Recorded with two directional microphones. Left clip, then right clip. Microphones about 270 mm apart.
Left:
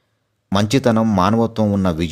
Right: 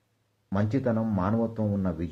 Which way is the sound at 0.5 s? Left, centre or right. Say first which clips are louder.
Left 12 dB; left.